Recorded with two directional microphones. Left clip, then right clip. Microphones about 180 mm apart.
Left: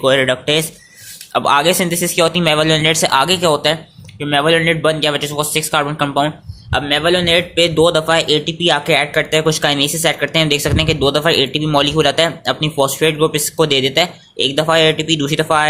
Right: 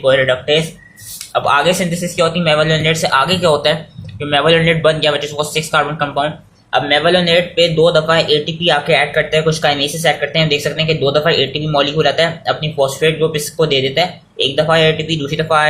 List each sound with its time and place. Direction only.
0.0 s speech: 55° left (ahead or behind)